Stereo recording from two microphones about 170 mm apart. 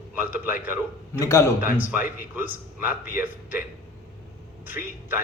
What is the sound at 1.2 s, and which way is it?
Speech, 15° left (ahead or behind).